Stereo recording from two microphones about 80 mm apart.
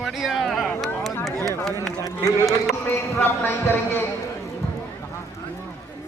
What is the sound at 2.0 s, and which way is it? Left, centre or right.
Speech, left.